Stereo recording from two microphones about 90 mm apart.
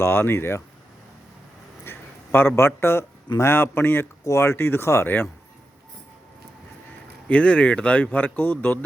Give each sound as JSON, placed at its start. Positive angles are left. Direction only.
{"t": 0.0, "sound": "speech", "side_deg": 25}
{"t": 1.8, "sound": "a sound", "side_deg": 25}
{"t": 2.6, "sound": "speech", "side_deg": 30}
{"t": 7.3, "sound": "speech", "side_deg": 15}